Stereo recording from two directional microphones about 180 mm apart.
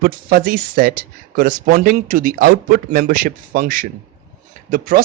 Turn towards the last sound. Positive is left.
turn(degrees=-50)  # may be behind; listen again after turning